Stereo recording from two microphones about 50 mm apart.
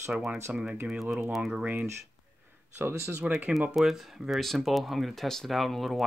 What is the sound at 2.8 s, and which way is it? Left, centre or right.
Speech, right.